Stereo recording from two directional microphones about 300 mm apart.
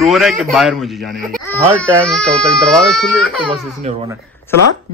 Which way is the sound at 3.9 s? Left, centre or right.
Right.